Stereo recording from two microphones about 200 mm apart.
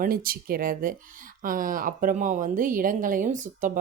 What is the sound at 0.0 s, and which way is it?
A woman's voice, 45° right (ahead or behind).